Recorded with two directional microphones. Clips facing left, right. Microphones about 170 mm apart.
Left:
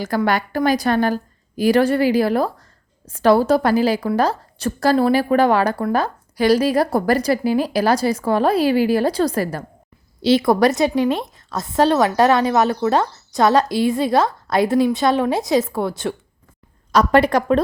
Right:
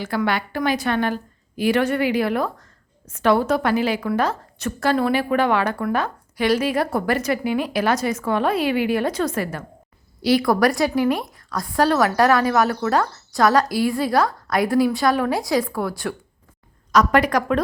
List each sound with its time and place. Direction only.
0.0 s a woman's voice: 40° left (ahead or behind)
10.2 s a woman's voice: 25° left (ahead or behind)